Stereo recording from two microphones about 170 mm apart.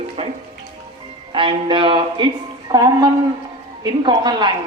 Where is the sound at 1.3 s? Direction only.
30° right (ahead or behind).